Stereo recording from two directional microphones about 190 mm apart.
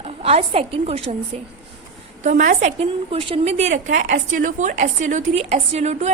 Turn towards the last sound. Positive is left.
turn(degrees=-35)  # may be behind; listen again after turning